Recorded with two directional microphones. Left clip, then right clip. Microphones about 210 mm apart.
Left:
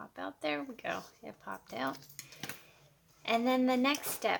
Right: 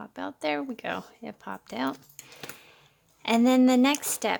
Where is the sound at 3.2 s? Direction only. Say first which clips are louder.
Right 8 dB; 50° right (ahead or behind).